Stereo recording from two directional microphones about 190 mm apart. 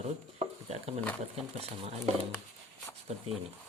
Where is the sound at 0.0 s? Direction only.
35° right (ahead or behind).